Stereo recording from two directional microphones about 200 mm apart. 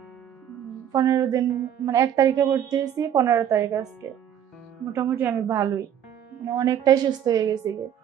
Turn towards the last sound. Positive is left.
turn(degrees=-15)  # may be behind; listen again after turning